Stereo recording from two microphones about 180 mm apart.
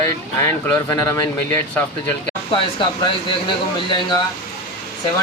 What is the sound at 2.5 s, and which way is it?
Speech, 25° left (ahead or behind).